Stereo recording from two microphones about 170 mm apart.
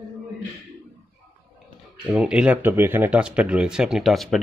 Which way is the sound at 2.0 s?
5° right (ahead or behind).